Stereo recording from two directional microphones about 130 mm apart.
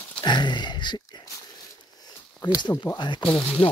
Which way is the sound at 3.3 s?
10° left (ahead or behind).